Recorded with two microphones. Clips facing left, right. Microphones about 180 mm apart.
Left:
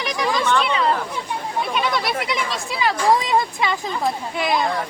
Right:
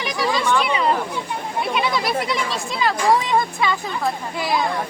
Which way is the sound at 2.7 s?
10° left (ahead or behind).